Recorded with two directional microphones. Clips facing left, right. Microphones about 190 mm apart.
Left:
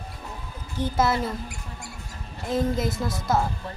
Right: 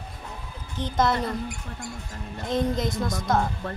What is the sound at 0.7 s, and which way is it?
Speech, 5° left (ahead or behind).